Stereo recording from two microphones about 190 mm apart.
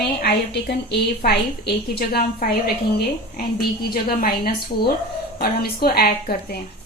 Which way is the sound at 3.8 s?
50° left (ahead or behind).